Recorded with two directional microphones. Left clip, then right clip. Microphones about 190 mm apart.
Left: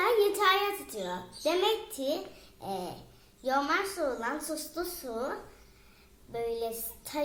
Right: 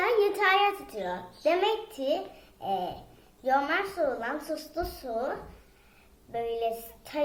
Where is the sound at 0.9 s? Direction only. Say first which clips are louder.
Right 2 dB; 10° left (ahead or behind).